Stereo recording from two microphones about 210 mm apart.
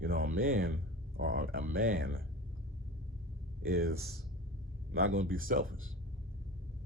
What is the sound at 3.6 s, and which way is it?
Speech, 45° right (ahead or behind).